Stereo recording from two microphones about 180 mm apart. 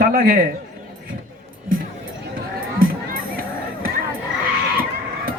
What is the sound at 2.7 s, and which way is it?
Music, 55° right (ahead or behind).